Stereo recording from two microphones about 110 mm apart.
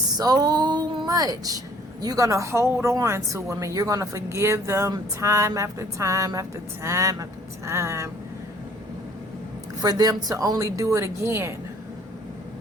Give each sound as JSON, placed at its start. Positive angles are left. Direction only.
{"t": 0.1, "sound": "a woman's voice", "side_deg": -35}
{"t": 9.8, "sound": "speech", "side_deg": -35}